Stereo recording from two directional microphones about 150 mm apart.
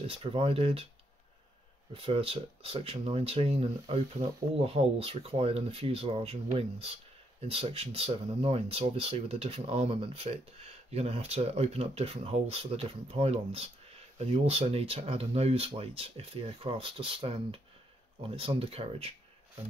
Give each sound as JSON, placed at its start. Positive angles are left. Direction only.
{"t": 0.0, "sound": "speech", "side_deg": -40}
{"t": 2.0, "sound": "speech", "side_deg": -40}